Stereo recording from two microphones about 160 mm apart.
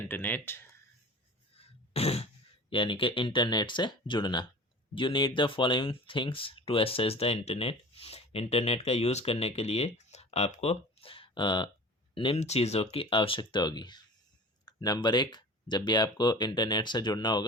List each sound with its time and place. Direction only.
0.0 s speech: 10° left (ahead or behind)
1.5 s a sound: 40° left (ahead or behind)
2.6 s speech: 30° left (ahead or behind)